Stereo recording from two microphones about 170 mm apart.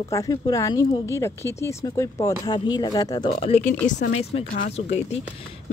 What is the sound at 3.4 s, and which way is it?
Speech, 40° left (ahead or behind).